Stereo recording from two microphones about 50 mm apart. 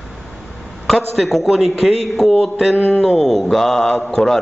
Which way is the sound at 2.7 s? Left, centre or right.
Left.